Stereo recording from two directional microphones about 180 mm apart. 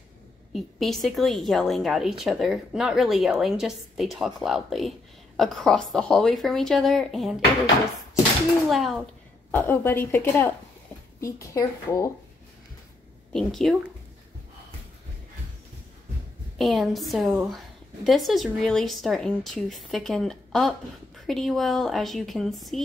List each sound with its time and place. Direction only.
0.5 s a woman's voice: centre (ahead or behind)
8.6 s a woman's voice: centre (ahead or behind)
9.5 s a woman's voice: 10° left (ahead or behind)
13.3 s a woman's voice: centre (ahead or behind)
16.5 s a woman's voice: centre (ahead or behind)